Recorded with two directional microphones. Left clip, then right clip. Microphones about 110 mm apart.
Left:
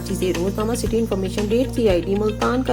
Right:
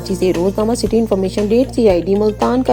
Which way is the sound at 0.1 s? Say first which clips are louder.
Right 7 dB; 25° right (ahead or behind).